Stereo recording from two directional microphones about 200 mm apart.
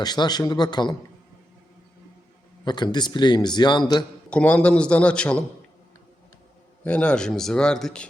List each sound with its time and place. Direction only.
0.0 s a man's voice: 20° left (ahead or behind)
2.6 s a man's voice: 20° left (ahead or behind)
4.3 s speech: 5° left (ahead or behind)
6.8 s speech: 5° left (ahead or behind)